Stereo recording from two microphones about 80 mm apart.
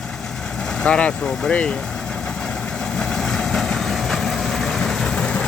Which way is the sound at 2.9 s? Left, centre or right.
Centre.